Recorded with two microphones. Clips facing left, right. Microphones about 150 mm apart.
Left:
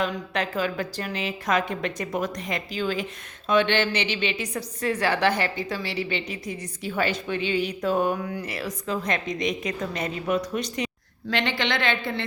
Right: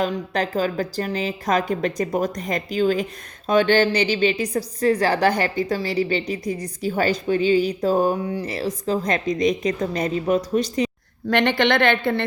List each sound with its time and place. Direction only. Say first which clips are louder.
0.0 s a woman's voice: right 4 dB; 35° right (ahead or behind)
11.3 s a woman's voice: right 7 dB; 55° right (ahead or behind)